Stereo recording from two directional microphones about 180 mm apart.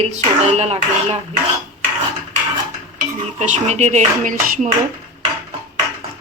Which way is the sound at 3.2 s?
40° right (ahead or behind).